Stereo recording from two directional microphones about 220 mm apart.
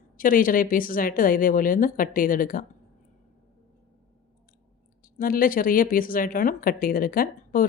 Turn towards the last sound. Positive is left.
turn(degrees=40)  # may be behind; listen again after turning